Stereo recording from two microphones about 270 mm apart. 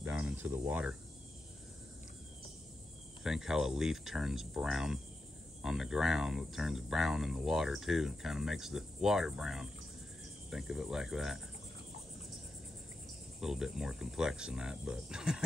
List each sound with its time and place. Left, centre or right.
0.0 s cricket: centre
3.3 s speech: centre
13.4 s speech: centre